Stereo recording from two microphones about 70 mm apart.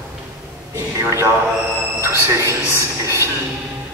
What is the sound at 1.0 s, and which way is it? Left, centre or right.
Speech, right.